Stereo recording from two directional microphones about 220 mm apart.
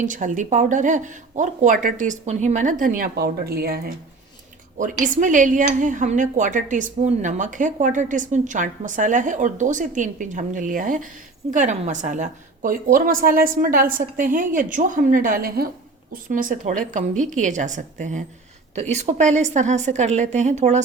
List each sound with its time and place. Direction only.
0.0 s speech: 35° right (ahead or behind)